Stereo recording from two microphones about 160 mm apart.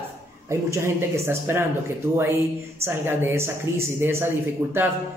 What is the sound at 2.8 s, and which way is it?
A man's voice, 15° right (ahead or behind).